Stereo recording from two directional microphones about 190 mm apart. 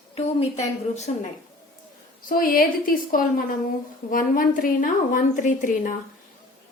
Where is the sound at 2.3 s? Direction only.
50° left (ahead or behind).